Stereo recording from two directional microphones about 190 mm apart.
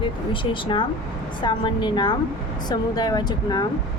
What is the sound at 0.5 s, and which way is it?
Speech, 25° left (ahead or behind).